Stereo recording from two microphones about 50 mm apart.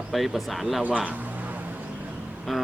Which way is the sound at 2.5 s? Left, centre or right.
Centre.